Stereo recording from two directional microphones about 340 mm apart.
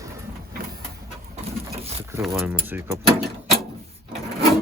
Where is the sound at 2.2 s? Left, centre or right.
Centre.